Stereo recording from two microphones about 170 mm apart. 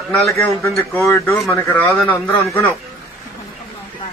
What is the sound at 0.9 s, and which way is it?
A man's voice, 15° left (ahead or behind).